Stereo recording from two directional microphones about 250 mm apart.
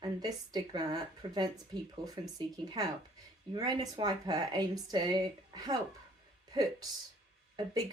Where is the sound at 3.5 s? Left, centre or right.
Centre.